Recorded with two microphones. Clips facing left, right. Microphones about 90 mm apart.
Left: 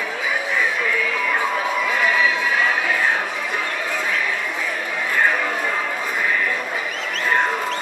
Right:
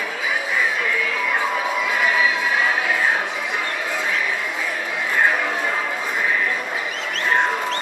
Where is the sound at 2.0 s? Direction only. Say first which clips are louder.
Even; 5° right (ahead or behind).